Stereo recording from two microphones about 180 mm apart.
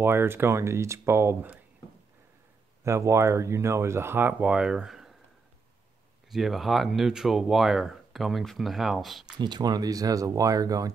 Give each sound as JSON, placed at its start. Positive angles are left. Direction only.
{"t": 0.0, "sound": "speech", "side_deg": -10}
{"t": 2.8, "sound": "speech", "side_deg": -15}
{"t": 6.3, "sound": "speech", "side_deg": 0}
{"t": 9.2, "sound": "speech", "side_deg": -25}